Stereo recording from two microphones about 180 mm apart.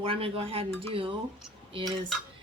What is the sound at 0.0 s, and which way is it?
Speech, 30° right (ahead or behind).